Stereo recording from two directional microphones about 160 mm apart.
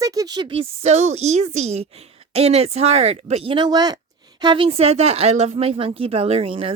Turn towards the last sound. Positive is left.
turn(degrees=-35)  # may be behind; listen again after turning